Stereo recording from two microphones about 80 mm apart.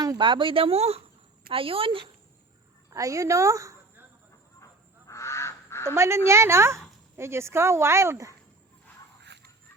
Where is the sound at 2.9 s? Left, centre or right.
Right.